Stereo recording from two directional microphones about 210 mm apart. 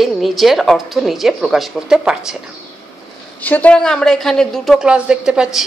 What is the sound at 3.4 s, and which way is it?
A woman's voice, 5° left (ahead or behind).